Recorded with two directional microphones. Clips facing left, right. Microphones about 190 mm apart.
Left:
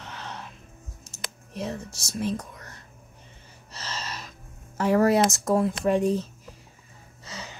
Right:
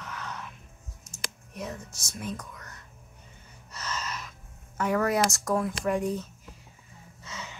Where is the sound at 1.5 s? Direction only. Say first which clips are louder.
Left 5 dB; 30° left (ahead or behind).